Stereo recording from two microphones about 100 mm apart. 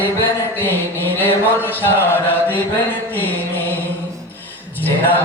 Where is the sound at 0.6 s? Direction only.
20° left (ahead or behind).